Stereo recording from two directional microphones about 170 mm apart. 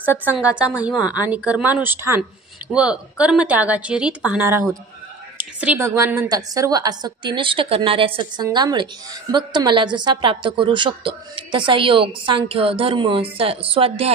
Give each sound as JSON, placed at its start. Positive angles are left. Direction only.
{"t": 0.0, "sound": "a woman's voice", "side_deg": -10}